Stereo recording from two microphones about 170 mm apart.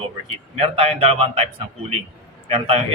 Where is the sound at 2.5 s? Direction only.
35° right (ahead or behind).